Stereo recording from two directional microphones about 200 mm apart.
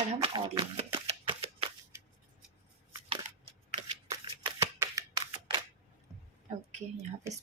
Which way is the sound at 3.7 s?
25° right (ahead or behind).